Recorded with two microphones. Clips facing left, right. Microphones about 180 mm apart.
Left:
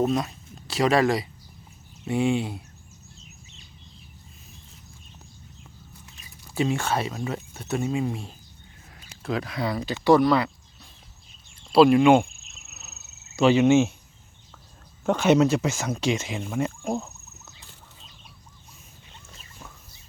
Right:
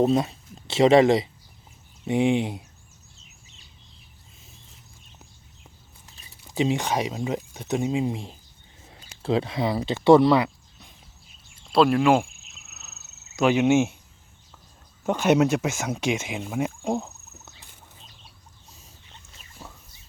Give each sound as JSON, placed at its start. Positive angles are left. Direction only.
{"t": 0.0, "sound": "speech", "side_deg": -25}
{"t": 6.1, "sound": "a sound", "side_deg": -30}
{"t": 6.5, "sound": "speech", "side_deg": -20}
{"t": 10.3, "sound": "a sound", "side_deg": -15}
{"t": 11.7, "sound": "cricket", "side_deg": 5}
{"t": 13.4, "sound": "speech", "side_deg": -10}
{"t": 15.0, "sound": "speech", "side_deg": -10}